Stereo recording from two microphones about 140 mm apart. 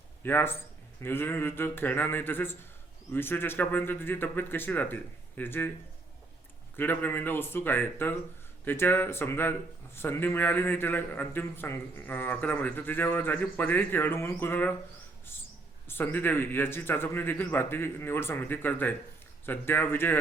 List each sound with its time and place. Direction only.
0.2 s speech: 15° left (ahead or behind)
6.7 s speech: 15° left (ahead or behind)